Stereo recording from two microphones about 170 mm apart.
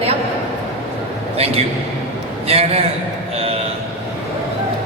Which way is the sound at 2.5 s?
35° right (ahead or behind).